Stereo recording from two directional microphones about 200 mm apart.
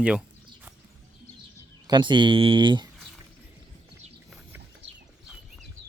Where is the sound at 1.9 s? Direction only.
20° right (ahead or behind).